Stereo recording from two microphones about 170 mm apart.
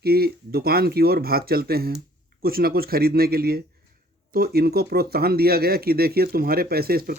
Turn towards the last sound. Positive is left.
turn(degrees=-60)  # may be behind; listen again after turning